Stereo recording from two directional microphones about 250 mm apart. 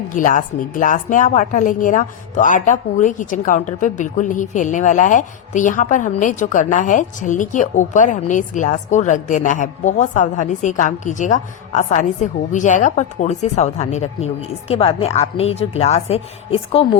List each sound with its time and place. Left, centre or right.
0.1 s a woman's voice: left